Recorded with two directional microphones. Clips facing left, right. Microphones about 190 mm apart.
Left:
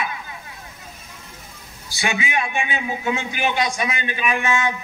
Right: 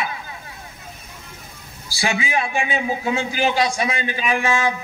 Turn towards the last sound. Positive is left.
turn(degrees=-30)  # may be behind; listen again after turning